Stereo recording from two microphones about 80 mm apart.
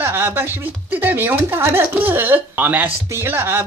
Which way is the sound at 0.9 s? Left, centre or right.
Right.